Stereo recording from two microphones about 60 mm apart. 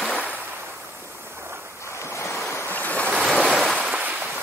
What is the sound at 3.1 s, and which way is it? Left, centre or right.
Waves, centre.